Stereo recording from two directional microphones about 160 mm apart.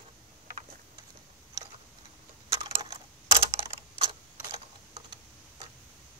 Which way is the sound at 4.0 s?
35° right (ahead or behind).